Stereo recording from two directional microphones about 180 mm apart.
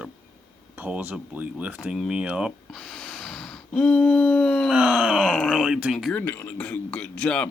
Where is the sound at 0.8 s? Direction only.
10° right (ahead or behind).